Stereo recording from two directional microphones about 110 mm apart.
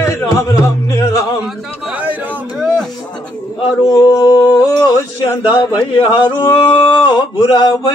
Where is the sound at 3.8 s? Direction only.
35° left (ahead or behind).